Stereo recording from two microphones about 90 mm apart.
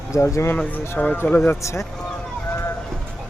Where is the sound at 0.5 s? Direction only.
15° left (ahead or behind).